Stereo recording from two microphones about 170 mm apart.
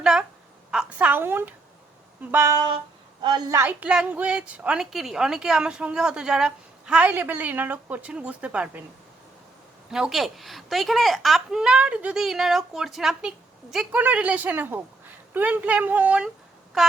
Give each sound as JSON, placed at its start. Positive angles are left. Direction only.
{"t": 0.0, "sound": "a woman's voice", "side_deg": -5}
{"t": 3.2, "sound": "a woman's voice", "side_deg": -25}
{"t": 3.6, "sound": "a woman's voice", "side_deg": -10}
{"t": 9.9, "sound": "speech", "side_deg": 0}
{"t": 16.8, "sound": "a sound", "side_deg": 0}